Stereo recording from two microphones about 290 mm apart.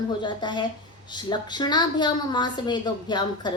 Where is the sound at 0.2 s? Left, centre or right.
Centre.